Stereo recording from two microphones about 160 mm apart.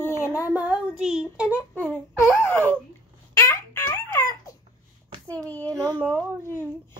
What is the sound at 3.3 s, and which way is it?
Babbling, 15° left (ahead or behind).